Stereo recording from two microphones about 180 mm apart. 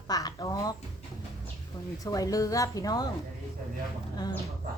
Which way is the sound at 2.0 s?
20° left (ahead or behind).